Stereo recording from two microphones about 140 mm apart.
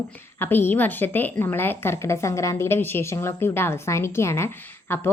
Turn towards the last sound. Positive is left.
turn(degrees=15)  # may be behind; listen again after turning